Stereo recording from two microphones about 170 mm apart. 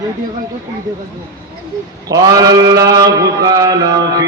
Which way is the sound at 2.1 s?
20° right (ahead or behind).